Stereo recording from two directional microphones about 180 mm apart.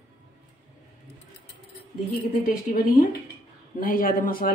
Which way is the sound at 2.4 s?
50° left (ahead or behind).